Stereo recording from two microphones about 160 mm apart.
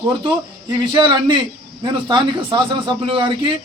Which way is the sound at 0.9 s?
30° right (ahead or behind).